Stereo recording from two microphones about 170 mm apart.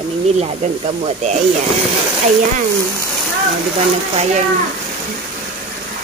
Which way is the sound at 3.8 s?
45° right (ahead or behind).